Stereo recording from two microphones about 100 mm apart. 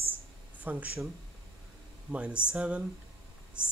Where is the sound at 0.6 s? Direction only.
15° right (ahead or behind).